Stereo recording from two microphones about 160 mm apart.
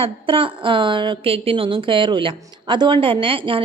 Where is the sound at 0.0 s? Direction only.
35° right (ahead or behind).